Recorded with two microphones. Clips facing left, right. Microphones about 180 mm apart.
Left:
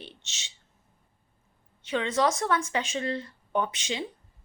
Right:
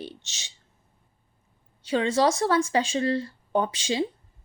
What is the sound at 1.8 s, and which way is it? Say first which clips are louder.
Speech: right 4 dB; 35° right (ahead or behind).